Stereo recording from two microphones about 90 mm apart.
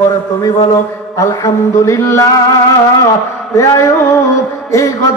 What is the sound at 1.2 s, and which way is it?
Mantra, 35° left (ahead or behind).